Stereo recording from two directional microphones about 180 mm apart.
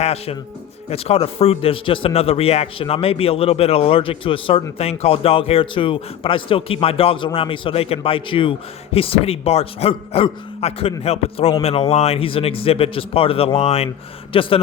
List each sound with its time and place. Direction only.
0.0 s a man's voice: 35° left (ahead or behind)